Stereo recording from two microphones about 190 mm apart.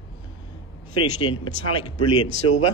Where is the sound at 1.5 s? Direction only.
50° right (ahead or behind).